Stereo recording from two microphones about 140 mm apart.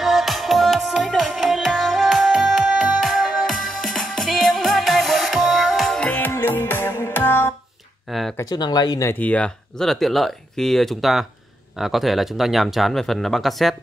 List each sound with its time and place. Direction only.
0.0 s music: centre (ahead or behind); by 7.5 s 15° left (ahead or behind)
8.1 s a sound: centre (ahead or behind)
8.4 s speech: 30° left (ahead or behind)
9.1 s speech: 10° left (ahead or behind)